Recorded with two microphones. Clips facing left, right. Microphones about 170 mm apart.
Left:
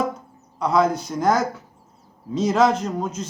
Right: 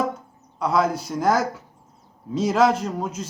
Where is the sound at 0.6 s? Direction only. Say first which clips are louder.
Left 2 dB; 5° right (ahead or behind).